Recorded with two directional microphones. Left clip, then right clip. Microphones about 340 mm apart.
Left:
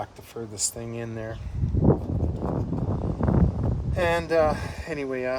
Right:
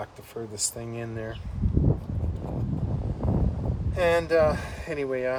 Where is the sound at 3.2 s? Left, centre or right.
Left.